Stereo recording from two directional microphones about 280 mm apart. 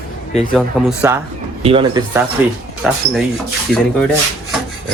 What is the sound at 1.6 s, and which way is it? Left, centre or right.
Speech, centre.